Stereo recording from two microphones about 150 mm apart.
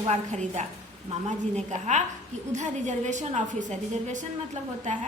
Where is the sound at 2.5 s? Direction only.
50° right (ahead or behind).